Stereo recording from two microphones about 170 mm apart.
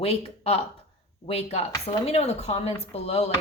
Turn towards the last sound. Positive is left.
turn(degrees=35)  # may be behind; listen again after turning